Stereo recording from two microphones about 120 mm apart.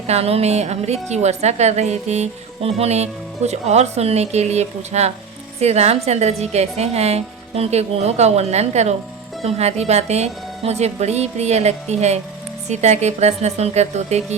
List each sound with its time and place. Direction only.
0.1 s a woman's voice: 60° right (ahead or behind)